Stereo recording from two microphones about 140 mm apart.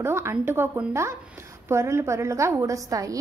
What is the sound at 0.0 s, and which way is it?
A woman's voice, 20° right (ahead or behind).